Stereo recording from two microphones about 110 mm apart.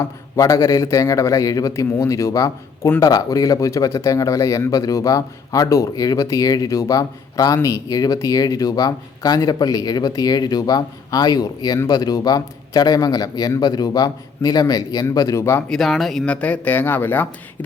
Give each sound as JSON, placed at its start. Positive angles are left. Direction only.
{"t": 0.0, "sound": "a man's voice", "side_deg": 30}
{"t": 15.7, "sound": "speech", "side_deg": 0}